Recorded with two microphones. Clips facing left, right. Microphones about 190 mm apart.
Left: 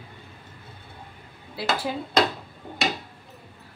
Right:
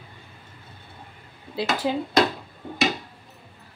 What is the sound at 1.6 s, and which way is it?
Speech, 20° right (ahead or behind).